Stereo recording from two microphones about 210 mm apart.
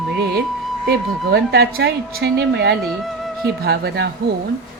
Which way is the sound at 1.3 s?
50° right (ahead or behind).